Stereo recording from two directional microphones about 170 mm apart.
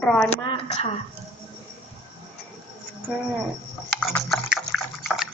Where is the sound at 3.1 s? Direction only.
5° right (ahead or behind).